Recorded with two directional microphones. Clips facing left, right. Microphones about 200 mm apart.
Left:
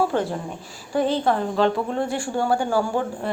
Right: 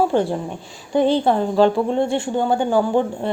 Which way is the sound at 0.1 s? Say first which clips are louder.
Right 5 dB; 30° right (ahead or behind).